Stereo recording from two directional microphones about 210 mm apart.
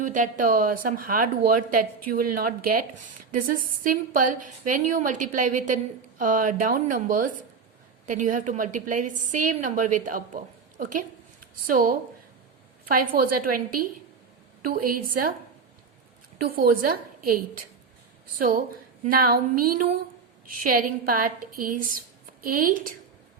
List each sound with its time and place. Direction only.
0.0 s speech: 40° right (ahead or behind)
16.4 s speech: 45° right (ahead or behind)